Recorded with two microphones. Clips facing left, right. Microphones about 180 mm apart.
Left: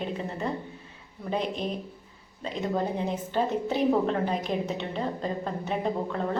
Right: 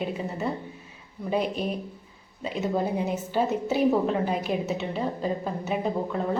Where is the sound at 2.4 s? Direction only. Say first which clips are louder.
Right 2 dB; 10° right (ahead or behind).